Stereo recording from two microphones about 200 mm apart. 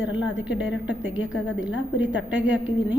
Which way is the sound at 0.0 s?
70° left (ahead or behind).